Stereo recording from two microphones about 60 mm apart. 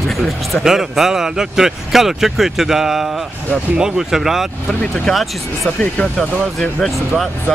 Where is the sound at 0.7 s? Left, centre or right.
Centre.